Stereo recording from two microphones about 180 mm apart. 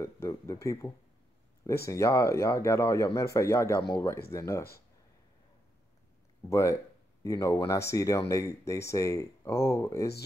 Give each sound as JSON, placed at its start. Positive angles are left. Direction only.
{"t": 0.0, "sound": "speech", "side_deg": 15}
{"t": 6.5, "sound": "speech", "side_deg": 15}